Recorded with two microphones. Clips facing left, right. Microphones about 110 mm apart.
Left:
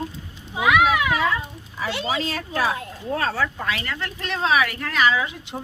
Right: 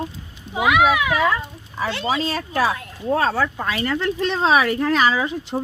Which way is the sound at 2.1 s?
30° right (ahead or behind).